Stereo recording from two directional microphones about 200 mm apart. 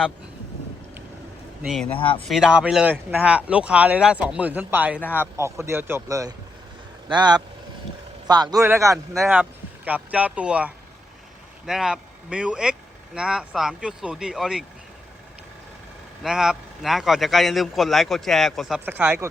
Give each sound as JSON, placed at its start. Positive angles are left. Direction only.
{"t": 1.6, "sound": "a man's voice", "side_deg": 0}
{"t": 4.9, "sound": "speech", "side_deg": 10}
{"t": 5.2, "sound": "speech", "side_deg": -15}
{"t": 9.1, "sound": "a man's voice", "side_deg": -5}
{"t": 16.2, "sound": "a man's voice", "side_deg": -5}